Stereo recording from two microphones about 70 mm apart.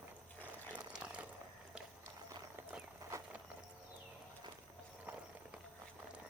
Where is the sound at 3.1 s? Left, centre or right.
Right.